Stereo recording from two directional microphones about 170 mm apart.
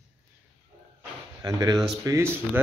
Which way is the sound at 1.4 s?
20° right (ahead or behind).